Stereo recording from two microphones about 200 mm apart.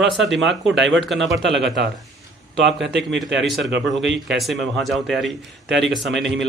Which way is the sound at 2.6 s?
60° right (ahead or behind).